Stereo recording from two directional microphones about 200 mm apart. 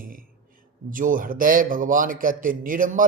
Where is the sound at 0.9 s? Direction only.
40° right (ahead or behind).